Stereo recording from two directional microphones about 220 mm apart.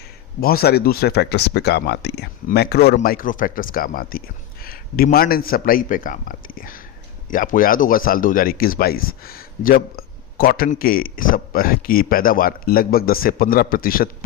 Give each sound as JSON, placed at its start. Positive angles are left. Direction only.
{"t": 0.4, "sound": "speech", "side_deg": 45}